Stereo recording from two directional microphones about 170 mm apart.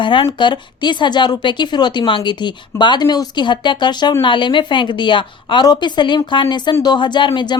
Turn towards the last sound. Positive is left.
turn(degrees=25)  # may be behind; listen again after turning